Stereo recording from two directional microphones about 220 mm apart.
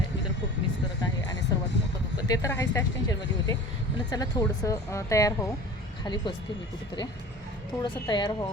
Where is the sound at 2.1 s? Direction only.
15° left (ahead or behind).